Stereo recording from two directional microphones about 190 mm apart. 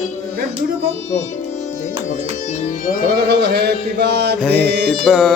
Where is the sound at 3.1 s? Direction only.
60° right (ahead or behind).